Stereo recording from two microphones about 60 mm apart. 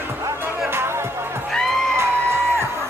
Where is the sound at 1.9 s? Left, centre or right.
Right.